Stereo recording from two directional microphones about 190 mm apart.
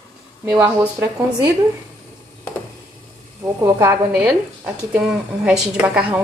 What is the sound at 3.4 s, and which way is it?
Speech, 15° right (ahead or behind).